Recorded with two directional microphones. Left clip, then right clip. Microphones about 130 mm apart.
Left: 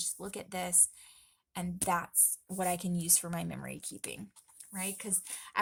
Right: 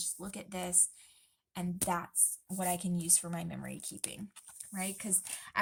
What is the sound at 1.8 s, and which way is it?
Speech, 55° left (ahead or behind).